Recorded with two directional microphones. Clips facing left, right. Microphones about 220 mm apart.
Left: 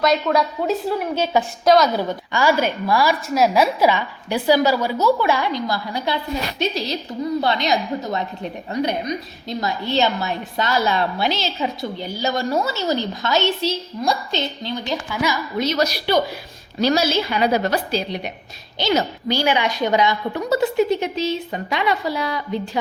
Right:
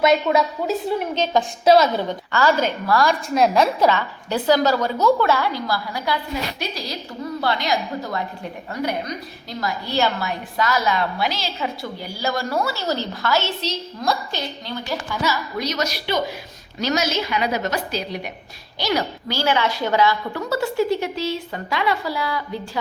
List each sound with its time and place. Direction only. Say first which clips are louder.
0.0 s a woman's voice: right 1 dB; 5° right (ahead or behind)
1.6 s a woman's voice: right 1 dB; 5° right (ahead or behind)
2.0 s a woman's voice: even; 10° left (ahead or behind)
15.5 s a woman's voice: left 4 dB; 25° left (ahead or behind)